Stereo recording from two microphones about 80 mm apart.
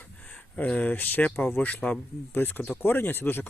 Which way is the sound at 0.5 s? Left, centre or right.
Centre.